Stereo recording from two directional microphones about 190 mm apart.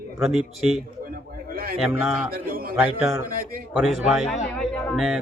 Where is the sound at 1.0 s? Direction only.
50° right (ahead or behind).